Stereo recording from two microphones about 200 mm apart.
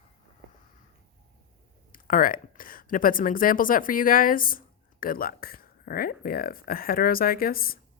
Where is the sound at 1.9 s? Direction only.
45° left (ahead or behind).